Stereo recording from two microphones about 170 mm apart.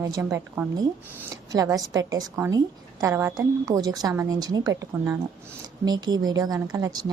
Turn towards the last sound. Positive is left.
turn(degrees=-20)  # may be behind; listen again after turning